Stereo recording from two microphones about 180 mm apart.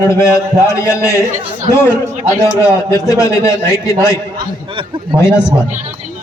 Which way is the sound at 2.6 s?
15° left (ahead or behind).